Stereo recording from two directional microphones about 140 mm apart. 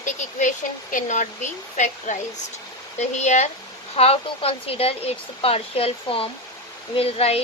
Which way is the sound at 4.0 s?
45° left (ahead or behind).